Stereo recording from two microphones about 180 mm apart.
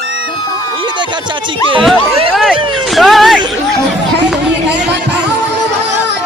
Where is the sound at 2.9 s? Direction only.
Centre (ahead or behind).